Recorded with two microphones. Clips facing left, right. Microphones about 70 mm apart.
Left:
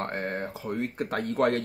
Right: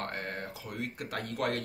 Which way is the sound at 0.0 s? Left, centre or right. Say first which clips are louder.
Left 6 dB; left.